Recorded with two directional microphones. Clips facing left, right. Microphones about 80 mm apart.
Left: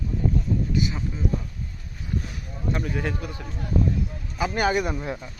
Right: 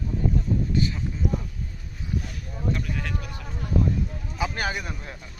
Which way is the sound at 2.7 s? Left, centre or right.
Left.